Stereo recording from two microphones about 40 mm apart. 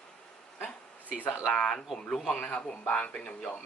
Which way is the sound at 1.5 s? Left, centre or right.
Centre.